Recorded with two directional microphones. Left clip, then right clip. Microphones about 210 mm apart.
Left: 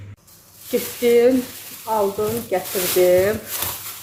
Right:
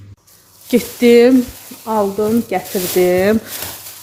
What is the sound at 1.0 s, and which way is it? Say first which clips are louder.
Speech: right 5 dB; 45° right (ahead or behind).